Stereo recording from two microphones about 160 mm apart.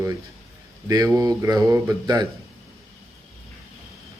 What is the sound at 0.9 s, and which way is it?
A man's voice, 20° right (ahead or behind).